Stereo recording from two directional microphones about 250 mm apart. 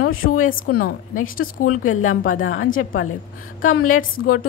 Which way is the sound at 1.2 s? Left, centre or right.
Left.